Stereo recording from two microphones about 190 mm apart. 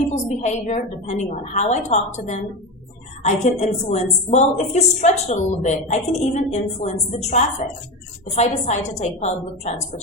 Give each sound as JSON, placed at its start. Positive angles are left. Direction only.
{"t": 0.1, "sound": "a woman's voice", "side_deg": 40}